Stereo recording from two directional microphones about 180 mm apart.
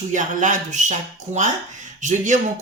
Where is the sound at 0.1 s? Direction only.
45° right (ahead or behind).